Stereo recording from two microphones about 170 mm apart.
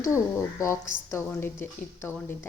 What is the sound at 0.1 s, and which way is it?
A woman's voice, 15° left (ahead or behind).